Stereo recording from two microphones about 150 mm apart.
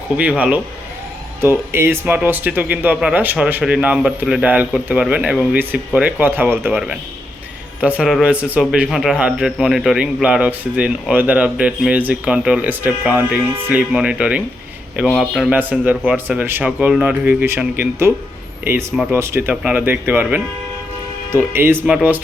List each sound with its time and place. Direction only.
0.2 s a man's voice: 10° right (ahead or behind)